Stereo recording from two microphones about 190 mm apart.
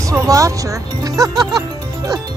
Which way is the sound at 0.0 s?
15° right (ahead or behind).